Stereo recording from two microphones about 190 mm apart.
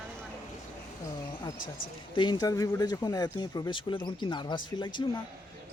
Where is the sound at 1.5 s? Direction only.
45° left (ahead or behind).